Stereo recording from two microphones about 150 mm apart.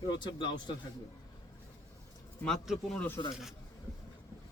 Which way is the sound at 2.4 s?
5° left (ahead or behind).